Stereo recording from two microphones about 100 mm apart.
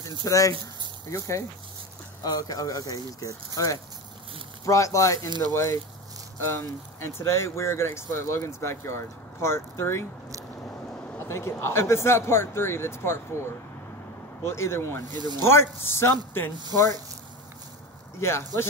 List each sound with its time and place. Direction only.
0.2 s speech: 35° left (ahead or behind)
11.2 s speech: 25° left (ahead or behind)
14.4 s speech: 25° left (ahead or behind)
15.1 s speech: 45° right (ahead or behind)
15.4 s speech: 25° left (ahead or behind)
18.2 s speech: 25° left (ahead or behind)